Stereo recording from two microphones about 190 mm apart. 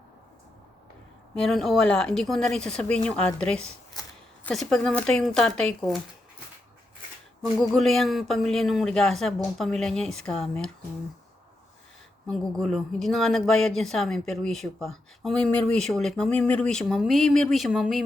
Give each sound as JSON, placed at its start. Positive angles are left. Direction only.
{"t": 1.4, "sound": "speech", "side_deg": 0}
{"t": 4.0, "sound": "a sound", "side_deg": 20}
{"t": 4.4, "sound": "speech", "side_deg": 5}
{"t": 7.6, "sound": "speech", "side_deg": 0}
{"t": 12.3, "sound": "speech", "side_deg": 0}